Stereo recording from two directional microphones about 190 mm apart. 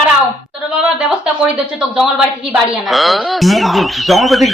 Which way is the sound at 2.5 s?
Centre (ahead or behind).